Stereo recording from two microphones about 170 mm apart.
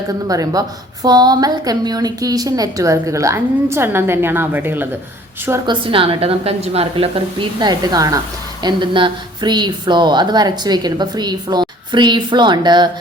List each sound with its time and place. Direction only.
0.3 s a woman's voice: 20° right (ahead or behind)
5.6 s a woman's voice: 30° right (ahead or behind)